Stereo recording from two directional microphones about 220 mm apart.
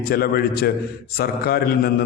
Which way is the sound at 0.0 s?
45° left (ahead or behind).